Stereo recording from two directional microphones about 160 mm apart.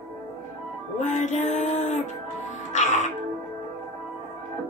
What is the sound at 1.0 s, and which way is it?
Music, 50° left (ahead or behind).